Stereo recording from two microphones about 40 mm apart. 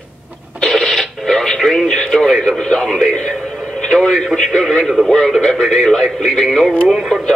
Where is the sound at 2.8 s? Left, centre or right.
Centre.